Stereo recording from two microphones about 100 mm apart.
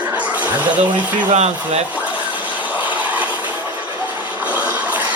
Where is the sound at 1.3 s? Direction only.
90° right.